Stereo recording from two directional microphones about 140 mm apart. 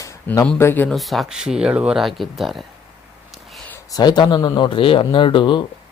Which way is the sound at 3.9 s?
30° left (ahead or behind).